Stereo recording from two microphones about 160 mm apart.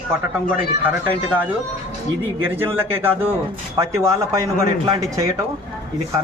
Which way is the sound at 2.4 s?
10° right (ahead or behind).